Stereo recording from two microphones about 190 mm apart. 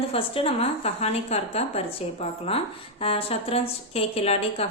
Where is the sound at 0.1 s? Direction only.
30° left (ahead or behind).